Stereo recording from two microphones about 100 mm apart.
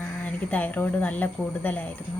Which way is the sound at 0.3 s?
15° left (ahead or behind).